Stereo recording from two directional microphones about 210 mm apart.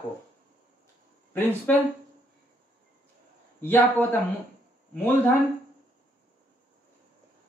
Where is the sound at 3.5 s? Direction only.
10° left (ahead or behind).